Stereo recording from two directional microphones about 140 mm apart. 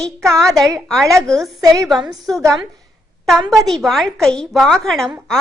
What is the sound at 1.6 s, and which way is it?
Speech, 25° right (ahead or behind).